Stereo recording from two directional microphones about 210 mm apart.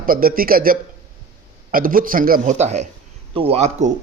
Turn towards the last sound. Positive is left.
turn(degrees=-30)  # may be behind; listen again after turning